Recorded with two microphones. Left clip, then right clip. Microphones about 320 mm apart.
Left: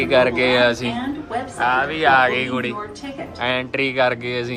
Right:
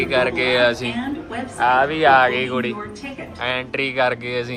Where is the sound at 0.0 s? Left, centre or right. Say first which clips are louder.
Left 3 dB; centre.